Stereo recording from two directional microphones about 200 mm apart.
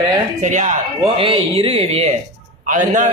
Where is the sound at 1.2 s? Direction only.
25° right (ahead or behind).